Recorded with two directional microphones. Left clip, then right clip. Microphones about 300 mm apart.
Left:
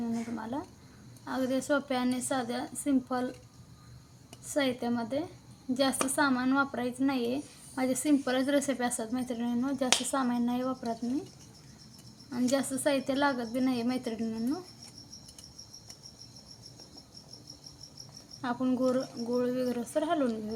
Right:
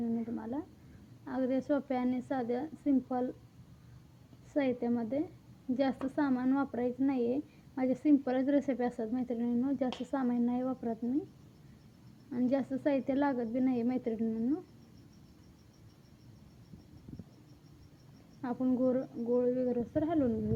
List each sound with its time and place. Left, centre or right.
0.3 s a sound: centre
1.2 s a woman's voice: centre
4.4 s a woman's voice: centre
12.3 s a woman's voice: centre
18.4 s a woman's voice: centre